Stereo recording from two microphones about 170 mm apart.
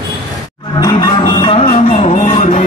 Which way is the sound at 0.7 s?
25° left (ahead or behind).